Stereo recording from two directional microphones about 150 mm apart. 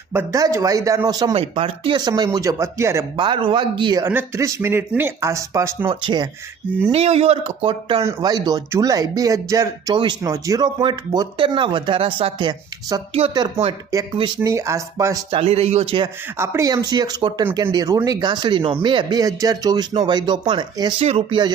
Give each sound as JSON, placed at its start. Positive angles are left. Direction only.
{"t": 0.1, "sound": "speech", "side_deg": -20}
{"t": 1.3, "sound": "speech", "side_deg": -40}
{"t": 3.2, "sound": "speech", "side_deg": -30}
{"t": 4.0, "sound": "speech", "side_deg": -15}
{"t": 5.9, "sound": "speech", "side_deg": -30}
{"t": 6.9, "sound": "speech", "side_deg": -45}
{"t": 7.7, "sound": "speech", "side_deg": -35}
{"t": 15.3, "sound": "speech", "side_deg": -40}
{"t": 16.4, "sound": "speech", "side_deg": -20}